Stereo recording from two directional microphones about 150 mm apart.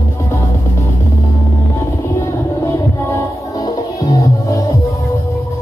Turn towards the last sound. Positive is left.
turn(degrees=25)  # may be behind; listen again after turning